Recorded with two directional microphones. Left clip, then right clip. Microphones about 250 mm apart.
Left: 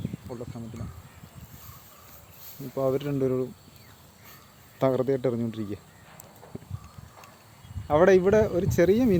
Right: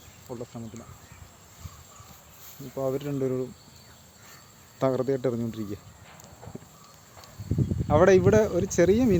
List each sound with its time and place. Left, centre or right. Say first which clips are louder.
0.3 s speech: right 4 dB; centre
2.7 s speech: left 3 dB; left
4.8 s speech: left 1 dB; centre
7.9 s speech: even; centre